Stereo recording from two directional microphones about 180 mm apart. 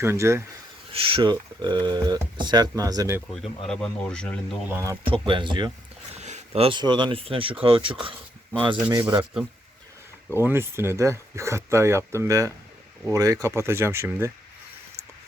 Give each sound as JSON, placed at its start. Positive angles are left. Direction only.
{"t": 0.0, "sound": "speech", "side_deg": -15}
{"t": 0.9, "sound": "speech", "side_deg": -30}
{"t": 3.6, "sound": "speech", "side_deg": 5}
{"t": 4.7, "sound": "speech", "side_deg": -15}
{"t": 5.0, "sound": "speech", "side_deg": -30}
{"t": 6.1, "sound": "speech", "side_deg": -40}
{"t": 9.0, "sound": "speech", "side_deg": -15}
{"t": 10.4, "sound": "speech", "side_deg": -15}